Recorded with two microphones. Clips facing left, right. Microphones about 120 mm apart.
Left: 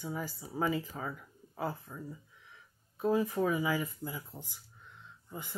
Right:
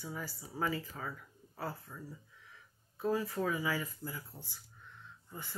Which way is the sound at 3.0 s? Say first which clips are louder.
Left 4 dB; 15° left (ahead or behind).